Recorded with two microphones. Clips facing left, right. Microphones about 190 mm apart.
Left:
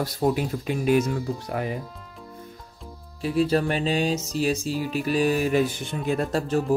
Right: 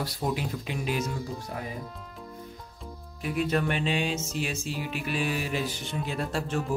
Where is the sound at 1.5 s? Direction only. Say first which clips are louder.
Left 8 dB; 75° left (ahead or behind).